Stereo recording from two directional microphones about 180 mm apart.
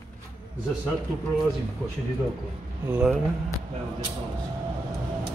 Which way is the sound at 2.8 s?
10° right (ahead or behind).